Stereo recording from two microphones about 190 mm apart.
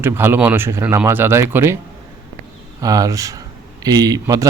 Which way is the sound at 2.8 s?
20° right (ahead or behind).